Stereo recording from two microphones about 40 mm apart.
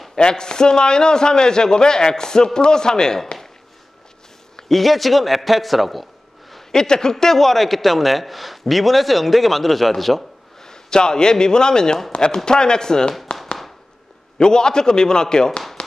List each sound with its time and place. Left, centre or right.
0.2 s a man's voice: centre
4.6 s a man's voice: centre
6.7 s a man's voice: centre
10.6 s speech: centre
14.4 s a man's voice: centre